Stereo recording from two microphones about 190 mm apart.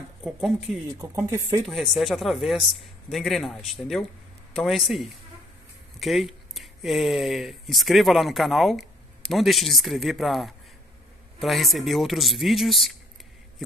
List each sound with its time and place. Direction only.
0.2 s speech: centre (ahead or behind)
1.0 s speech: 15° right (ahead or behind)
1.7 s speech: centre (ahead or behind)